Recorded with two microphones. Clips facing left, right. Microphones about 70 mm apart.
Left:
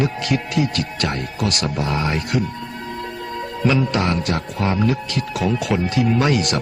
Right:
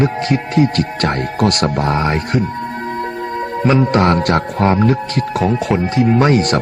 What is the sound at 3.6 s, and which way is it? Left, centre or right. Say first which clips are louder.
Speech: right 6 dB; right.